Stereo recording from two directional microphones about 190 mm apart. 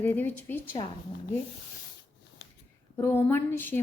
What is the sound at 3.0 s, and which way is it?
Speech, 10° left (ahead or behind).